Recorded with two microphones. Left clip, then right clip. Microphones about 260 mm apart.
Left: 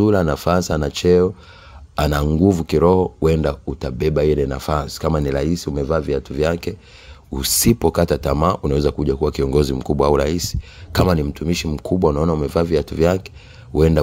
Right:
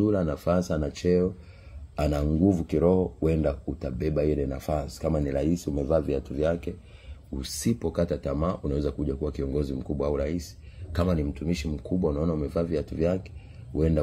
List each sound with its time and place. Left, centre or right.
0.0 s speech: left